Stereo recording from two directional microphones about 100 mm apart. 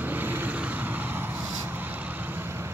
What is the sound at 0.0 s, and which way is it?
Vehicle, 20° right (ahead or behind).